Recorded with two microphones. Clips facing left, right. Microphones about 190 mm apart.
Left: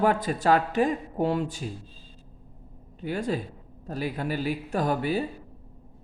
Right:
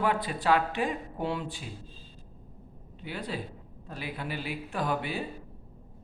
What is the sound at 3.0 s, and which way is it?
Speech, 45° left (ahead or behind).